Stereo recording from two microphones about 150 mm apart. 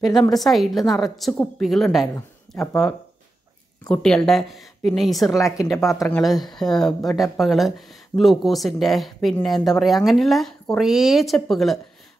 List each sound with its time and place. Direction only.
0.1 s speech: centre (ahead or behind)
2.5 s a sound: centre (ahead or behind)
3.9 s speech: 5° left (ahead or behind)
5.3 s speech: 20° left (ahead or behind)
6.4 s speech: centre (ahead or behind)